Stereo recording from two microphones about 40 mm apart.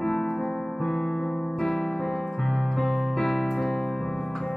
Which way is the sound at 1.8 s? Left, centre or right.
Centre.